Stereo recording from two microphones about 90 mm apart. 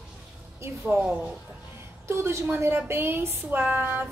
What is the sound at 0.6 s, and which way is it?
Speech, 25° right (ahead or behind).